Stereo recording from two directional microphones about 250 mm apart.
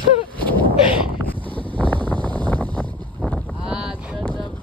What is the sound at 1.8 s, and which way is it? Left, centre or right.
Wind noise, centre.